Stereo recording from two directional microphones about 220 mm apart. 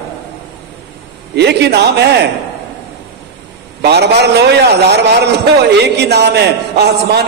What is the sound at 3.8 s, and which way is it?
A man's voice, 50° right (ahead or behind).